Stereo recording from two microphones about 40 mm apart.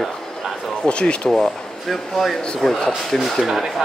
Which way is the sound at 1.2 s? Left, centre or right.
Centre.